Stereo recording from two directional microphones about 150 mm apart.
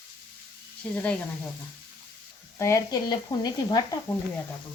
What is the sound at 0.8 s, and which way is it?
Speech, 5° left (ahead or behind).